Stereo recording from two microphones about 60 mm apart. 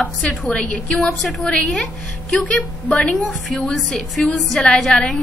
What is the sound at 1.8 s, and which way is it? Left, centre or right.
Speech, centre.